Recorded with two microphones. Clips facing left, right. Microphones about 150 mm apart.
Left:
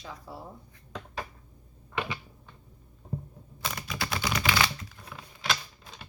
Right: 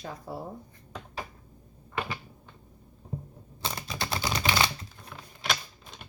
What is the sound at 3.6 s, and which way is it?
Typewriter, 30° right (ahead or behind).